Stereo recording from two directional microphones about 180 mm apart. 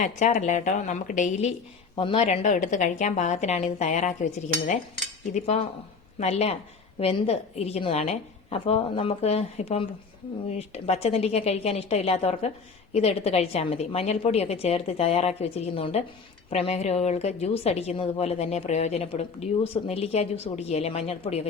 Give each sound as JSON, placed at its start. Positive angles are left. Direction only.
{"t": 0.0, "sound": "a woman's voice", "side_deg": 40}